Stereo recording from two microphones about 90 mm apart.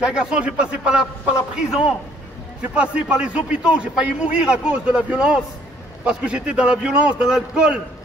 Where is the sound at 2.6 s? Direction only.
15° right (ahead or behind).